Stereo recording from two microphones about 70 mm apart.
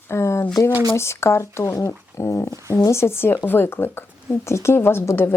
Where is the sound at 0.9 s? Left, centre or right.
Left.